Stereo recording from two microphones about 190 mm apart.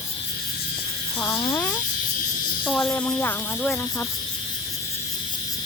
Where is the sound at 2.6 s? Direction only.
5° left (ahead or behind).